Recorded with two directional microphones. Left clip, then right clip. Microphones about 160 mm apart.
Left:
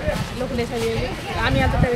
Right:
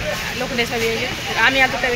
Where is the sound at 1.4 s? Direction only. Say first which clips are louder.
Right 7 dB; centre (ahead or behind).